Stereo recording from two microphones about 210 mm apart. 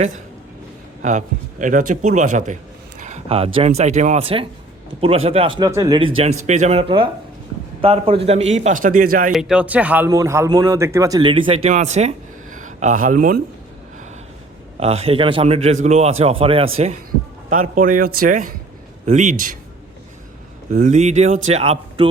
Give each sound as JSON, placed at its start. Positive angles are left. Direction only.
{"t": 1.0, "sound": "a man's voice", "side_deg": -35}
{"t": 6.5, "sound": "a man's voice", "side_deg": -35}
{"t": 9.3, "sound": "speech", "side_deg": -5}
{"t": 14.8, "sound": "speech", "side_deg": -30}
{"t": 17.5, "sound": "a man's voice", "side_deg": -40}
{"t": 20.7, "sound": "a man's voice", "side_deg": -35}